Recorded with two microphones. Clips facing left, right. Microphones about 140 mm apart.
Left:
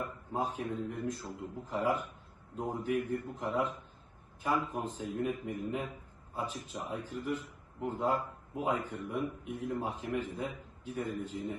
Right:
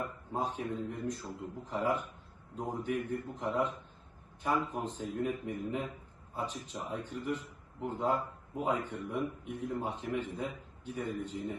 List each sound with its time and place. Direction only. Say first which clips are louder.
0.0 s a man's voice: even; 5° left (ahead or behind)